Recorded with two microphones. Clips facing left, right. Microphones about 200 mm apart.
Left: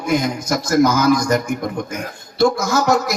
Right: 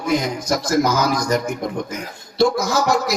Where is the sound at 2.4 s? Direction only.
50° left (ahead or behind).